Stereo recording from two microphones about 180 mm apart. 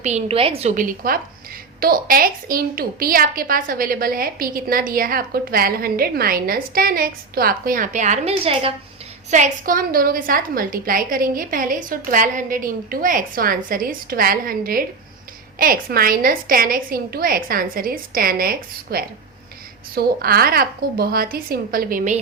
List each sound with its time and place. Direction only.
0.0 s a woman's voice: 40° right (ahead or behind)
9.3 s a woman's voice: 45° right (ahead or behind)